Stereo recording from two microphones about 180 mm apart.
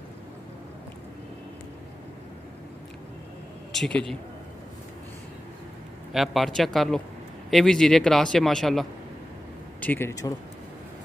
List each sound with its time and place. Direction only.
3.7 s speech: centre (ahead or behind)
6.1 s speech: centre (ahead or behind); by 10.3 s 15° left (ahead or behind)